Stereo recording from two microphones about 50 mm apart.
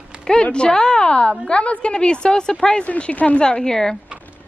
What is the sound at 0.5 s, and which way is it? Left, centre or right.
A woman's voice, centre.